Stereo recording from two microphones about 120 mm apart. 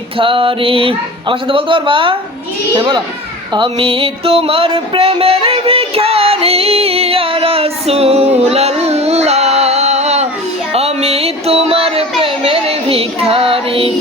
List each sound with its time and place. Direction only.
0.2 s a child's voice: 45° right (ahead or behind)
3.5 s a sound: 45° right (ahead or behind); by 10.2 s 65° right (ahead or behind)
10.7 s music: 55° right (ahead or behind)
12.2 s child singing: 50° right (ahead or behind)